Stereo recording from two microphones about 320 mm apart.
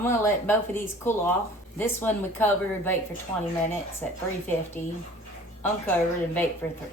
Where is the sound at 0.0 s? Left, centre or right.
Centre.